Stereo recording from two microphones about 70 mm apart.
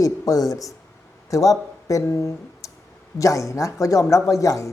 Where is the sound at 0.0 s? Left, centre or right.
Left.